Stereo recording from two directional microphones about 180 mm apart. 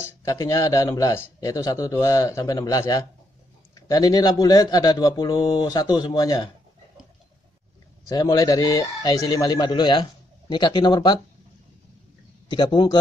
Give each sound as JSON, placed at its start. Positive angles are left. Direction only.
{"t": 0.2, "sound": "a man's voice", "side_deg": 20}
{"t": 8.1, "sound": "a man's voice", "side_deg": 20}
{"t": 12.4, "sound": "a man's voice", "side_deg": 25}